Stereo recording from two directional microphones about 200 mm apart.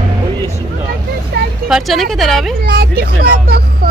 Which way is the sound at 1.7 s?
Centre (ahead or behind).